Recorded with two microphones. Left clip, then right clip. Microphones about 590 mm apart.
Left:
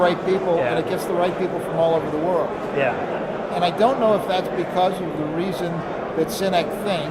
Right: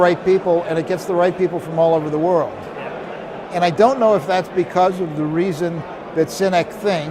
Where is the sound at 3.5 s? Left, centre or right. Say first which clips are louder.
Right 5 dB; right.